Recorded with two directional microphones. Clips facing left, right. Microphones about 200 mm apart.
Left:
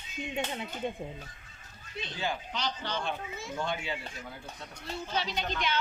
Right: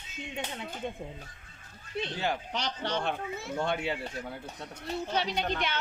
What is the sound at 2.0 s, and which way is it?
A woman's voice, 65° right (ahead or behind).